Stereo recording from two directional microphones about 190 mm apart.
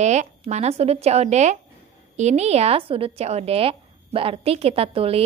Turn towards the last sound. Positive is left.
turn(degrees=-30)  # may be behind; listen again after turning